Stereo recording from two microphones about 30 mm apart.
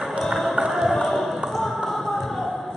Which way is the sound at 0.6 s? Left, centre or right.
Centre.